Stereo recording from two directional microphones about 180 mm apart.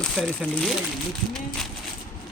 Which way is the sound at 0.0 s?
Centre (ahead or behind).